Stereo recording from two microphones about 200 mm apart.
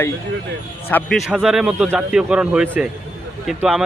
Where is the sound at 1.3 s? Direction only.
Centre (ahead or behind).